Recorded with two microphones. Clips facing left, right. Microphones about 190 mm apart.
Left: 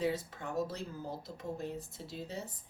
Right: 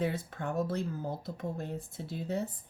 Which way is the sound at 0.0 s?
55° right (ahead or behind).